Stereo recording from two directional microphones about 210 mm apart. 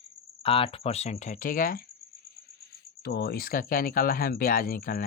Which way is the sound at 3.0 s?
50° left (ahead or behind).